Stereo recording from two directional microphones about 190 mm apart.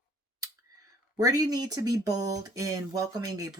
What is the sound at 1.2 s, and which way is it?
A woman's voice, 20° right (ahead or behind).